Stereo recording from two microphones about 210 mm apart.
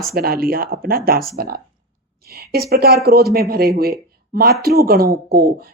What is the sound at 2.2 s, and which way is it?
Speech, 45° right (ahead or behind).